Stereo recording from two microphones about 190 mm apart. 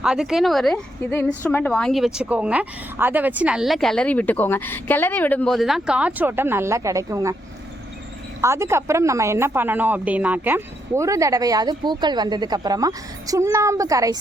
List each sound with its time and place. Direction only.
0.0 s a woman's voice: 5° right (ahead or behind)
8.4 s a woman's voice: 15° right (ahead or behind)